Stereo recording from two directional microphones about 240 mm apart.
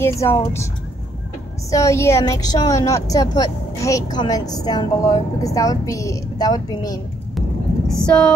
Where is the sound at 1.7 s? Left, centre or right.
Centre.